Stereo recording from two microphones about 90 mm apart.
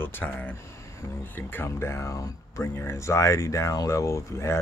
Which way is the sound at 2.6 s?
25° left (ahead or behind).